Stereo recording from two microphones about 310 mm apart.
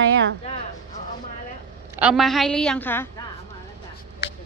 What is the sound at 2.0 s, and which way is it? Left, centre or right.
A woman's voice, centre.